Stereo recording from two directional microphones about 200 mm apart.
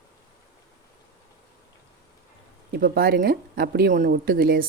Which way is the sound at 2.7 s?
45° right (ahead or behind).